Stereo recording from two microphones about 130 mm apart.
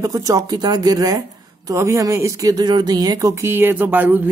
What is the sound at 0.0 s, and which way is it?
Speech, 25° right (ahead or behind).